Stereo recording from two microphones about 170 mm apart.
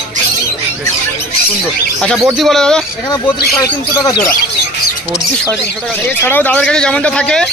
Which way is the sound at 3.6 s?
20° left (ahead or behind).